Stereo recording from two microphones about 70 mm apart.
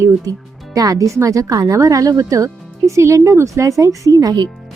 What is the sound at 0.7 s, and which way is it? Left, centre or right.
Speech, right.